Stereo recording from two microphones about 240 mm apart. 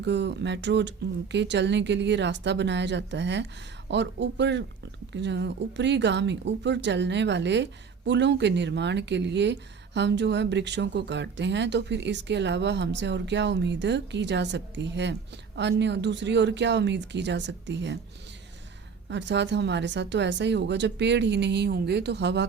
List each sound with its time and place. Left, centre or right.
0.0 s speech: right
19.0 s speech: right